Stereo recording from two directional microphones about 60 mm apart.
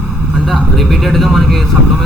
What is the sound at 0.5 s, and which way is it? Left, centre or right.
Vehicle, centre.